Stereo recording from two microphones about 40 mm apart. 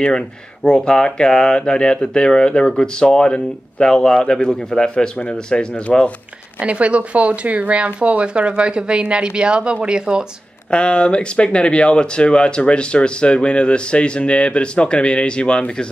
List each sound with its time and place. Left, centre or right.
0.7 s speech: centre
6.6 s speech: right
10.7 s speech: left